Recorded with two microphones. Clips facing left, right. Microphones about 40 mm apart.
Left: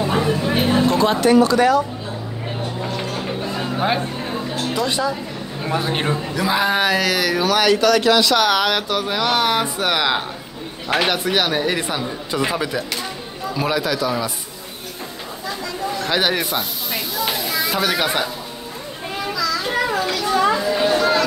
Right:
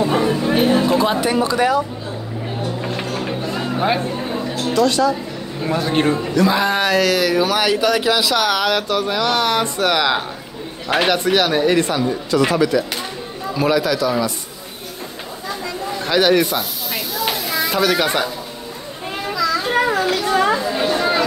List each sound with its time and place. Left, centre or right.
0.0 s a sound: centre
3.1 s music: centre
4.7 s a man's voice: centre
16.1 s snake: centre
19.3 s children playing: right
20.5 s chatter: centre